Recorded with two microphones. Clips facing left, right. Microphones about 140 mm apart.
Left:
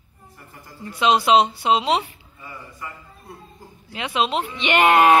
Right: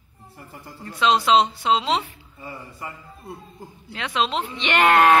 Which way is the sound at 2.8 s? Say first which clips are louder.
Right 1 dB; 25° right (ahead or behind).